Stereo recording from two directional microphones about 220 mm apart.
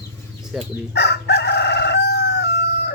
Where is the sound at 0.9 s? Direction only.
50° left (ahead or behind).